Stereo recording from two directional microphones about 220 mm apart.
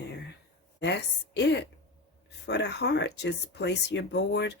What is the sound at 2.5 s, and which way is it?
Speech, 50° left (ahead or behind).